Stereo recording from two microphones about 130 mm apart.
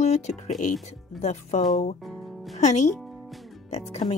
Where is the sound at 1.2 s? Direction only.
65° left (ahead or behind).